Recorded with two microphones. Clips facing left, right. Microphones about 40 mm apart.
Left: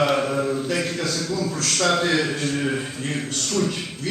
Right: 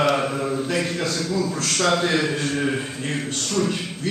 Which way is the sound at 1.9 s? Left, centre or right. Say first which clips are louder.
Even; centre.